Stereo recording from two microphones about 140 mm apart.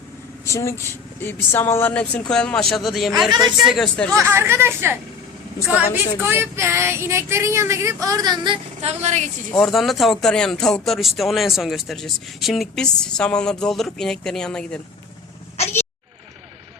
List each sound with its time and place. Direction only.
0.4 s speech: 20° left (ahead or behind); by 4.1 s 5° left (ahead or behind)
4.1 s speech: 20° right (ahead or behind)
5.6 s child singing: 10° right (ahead or behind); by 8.5 s 30° right (ahead or behind)
8.8 s a woman's voice: 50° right (ahead or behind)
9.6 s speech: centre (ahead or behind)
15.5 s vehicle: 50° left (ahead or behind)